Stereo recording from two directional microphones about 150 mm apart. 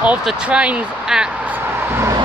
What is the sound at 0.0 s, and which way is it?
Speech, 5° right (ahead or behind).